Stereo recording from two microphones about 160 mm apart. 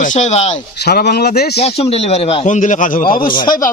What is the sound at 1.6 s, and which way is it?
Speech, 40° left (ahead or behind).